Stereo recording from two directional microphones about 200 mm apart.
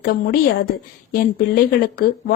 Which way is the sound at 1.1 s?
50° left (ahead or behind).